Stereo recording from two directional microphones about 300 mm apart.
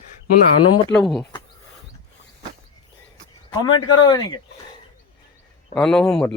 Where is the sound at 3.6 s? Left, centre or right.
Centre.